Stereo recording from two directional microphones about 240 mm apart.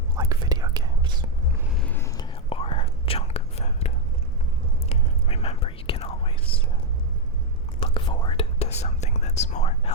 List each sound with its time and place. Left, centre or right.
0.2 s whispering: centre
1.6 s whispering: centre; by 6.6 s left
7.8 s whispering: left